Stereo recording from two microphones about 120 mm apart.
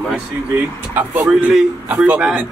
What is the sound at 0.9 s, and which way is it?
A man's voice, 15° right (ahead or behind).